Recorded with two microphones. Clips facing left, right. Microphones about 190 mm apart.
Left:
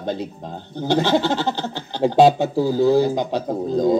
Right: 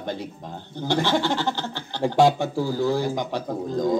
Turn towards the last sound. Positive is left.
turn(degrees=15)  # may be behind; listen again after turning